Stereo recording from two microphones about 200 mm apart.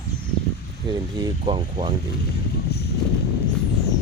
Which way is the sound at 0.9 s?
20° right (ahead or behind).